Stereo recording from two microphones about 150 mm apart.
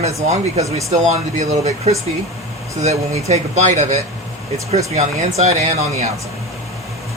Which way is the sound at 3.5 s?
50° right (ahead or behind).